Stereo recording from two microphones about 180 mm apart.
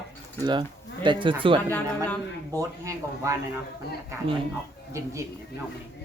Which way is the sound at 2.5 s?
15° right (ahead or behind).